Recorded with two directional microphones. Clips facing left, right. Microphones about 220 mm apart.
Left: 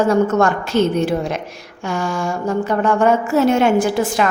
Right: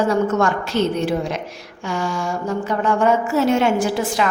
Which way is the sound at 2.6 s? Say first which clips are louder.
Left 2 dB; 50° left (ahead or behind).